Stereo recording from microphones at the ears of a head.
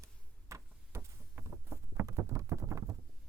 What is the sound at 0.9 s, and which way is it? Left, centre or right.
Clip-clop, right.